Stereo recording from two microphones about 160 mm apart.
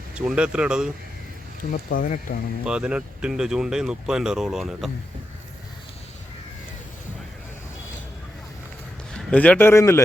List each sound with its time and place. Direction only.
0.1 s speech: 5° right (ahead or behind)
1.7 s speech: 60° left (ahead or behind)
2.6 s speech: 5° right (ahead or behind)
9.1 s speech: 10° left (ahead or behind)